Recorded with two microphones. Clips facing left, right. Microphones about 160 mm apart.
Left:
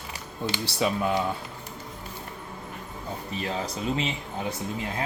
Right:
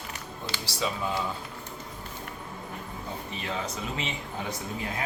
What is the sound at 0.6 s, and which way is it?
Speech, 60° left (ahead or behind).